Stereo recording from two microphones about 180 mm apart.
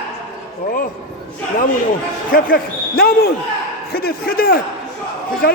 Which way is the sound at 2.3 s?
55° left (ahead or behind).